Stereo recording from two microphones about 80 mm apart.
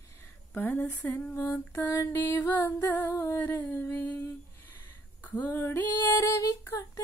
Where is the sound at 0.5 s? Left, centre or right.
Left.